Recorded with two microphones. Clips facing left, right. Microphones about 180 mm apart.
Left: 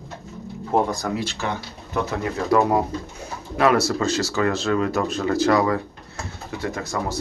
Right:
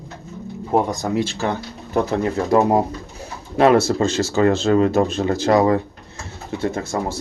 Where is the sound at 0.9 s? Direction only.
20° right (ahead or behind).